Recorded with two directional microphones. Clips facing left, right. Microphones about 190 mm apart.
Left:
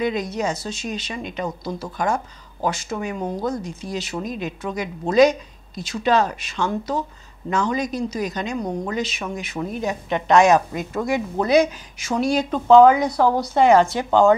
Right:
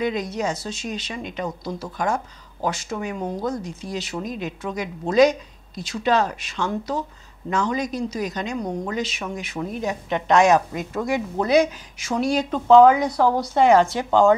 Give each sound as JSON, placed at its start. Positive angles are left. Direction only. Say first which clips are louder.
{"t": 0.0, "sound": "a woman's voice", "louder": "left 1 dB", "side_deg": 15}
{"t": 1.6, "sound": "a woman's voice", "louder": "left 1 dB", "side_deg": 30}
{"t": 3.2, "sound": "speech", "louder": "left 1 dB", "side_deg": 25}
{"t": 3.9, "sound": "a woman's voice", "louder": "left 1 dB", "side_deg": 10}
{"t": 8.5, "sound": "speech", "louder": "left 1 dB", "side_deg": 30}
{"t": 8.9, "sound": "a woman's voice", "louder": "left 1 dB", "side_deg": 5}
{"t": 13.1, "sound": "speech", "louder": "left 1 dB", "side_deg": 25}
{"t": 13.6, "sound": "a woman's voice", "louder": "left 1 dB", "side_deg": 15}